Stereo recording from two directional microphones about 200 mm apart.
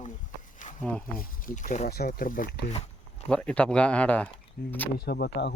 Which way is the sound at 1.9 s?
50° left (ahead or behind).